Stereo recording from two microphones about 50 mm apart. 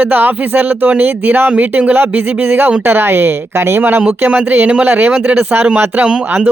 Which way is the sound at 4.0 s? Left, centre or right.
Right.